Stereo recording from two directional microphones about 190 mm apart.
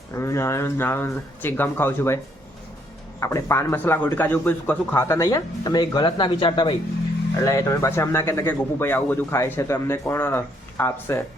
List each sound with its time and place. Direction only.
0.1 s speech: 15° left (ahead or behind)
3.2 s speech: 15° left (ahead or behind)